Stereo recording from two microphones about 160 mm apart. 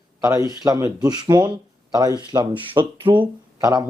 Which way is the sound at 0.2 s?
20° right (ahead or behind).